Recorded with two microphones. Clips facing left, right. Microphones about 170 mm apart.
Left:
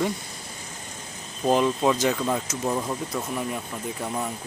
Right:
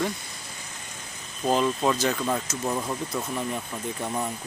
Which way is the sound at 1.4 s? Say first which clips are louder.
Left 2 dB; 15° left (ahead or behind).